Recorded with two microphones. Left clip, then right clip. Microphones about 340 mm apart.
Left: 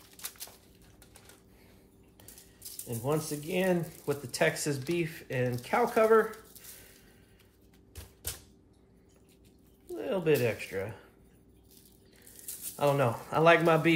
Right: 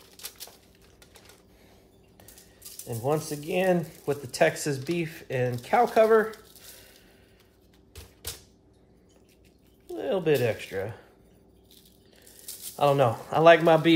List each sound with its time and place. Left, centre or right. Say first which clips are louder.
2.9 s speech: right 4 dB; right
7.9 s typewriter: right 3 dB; centre
9.9 s speech: right 3 dB; right
12.7 s speech: right 5 dB; right